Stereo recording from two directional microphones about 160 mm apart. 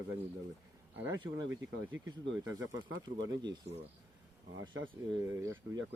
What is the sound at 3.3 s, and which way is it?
Speech, 25° right (ahead or behind).